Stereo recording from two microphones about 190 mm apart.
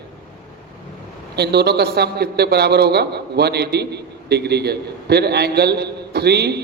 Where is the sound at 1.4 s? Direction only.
60° right (ahead or behind).